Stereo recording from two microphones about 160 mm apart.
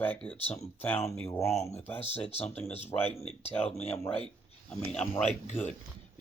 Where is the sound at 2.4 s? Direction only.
10° left (ahead or behind).